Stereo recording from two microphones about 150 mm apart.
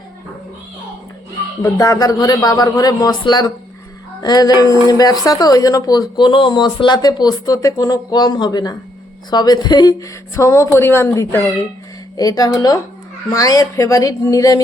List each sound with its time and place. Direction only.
1.6 s speech: 20° left (ahead or behind)